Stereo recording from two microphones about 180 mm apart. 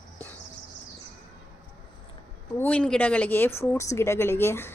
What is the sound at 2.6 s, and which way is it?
A woman's voice, 5° left (ahead or behind).